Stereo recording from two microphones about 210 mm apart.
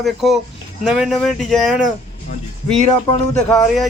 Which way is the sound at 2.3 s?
35° left (ahead or behind).